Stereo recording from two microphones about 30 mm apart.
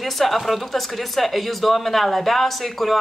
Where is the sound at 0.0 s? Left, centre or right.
Centre.